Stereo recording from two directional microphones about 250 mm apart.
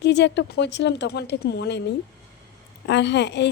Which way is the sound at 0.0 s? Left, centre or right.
Left.